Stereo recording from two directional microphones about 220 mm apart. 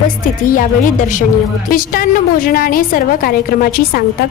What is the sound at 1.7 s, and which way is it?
A woman's voice, 40° left (ahead or behind).